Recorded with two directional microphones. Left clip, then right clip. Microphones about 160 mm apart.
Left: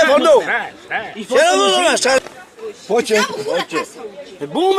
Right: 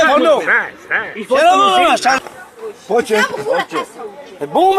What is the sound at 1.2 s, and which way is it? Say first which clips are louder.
Speech: right 2 dB; 80° left.